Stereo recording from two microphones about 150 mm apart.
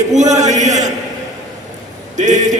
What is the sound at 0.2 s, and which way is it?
Speech, 50° right (ahead or behind).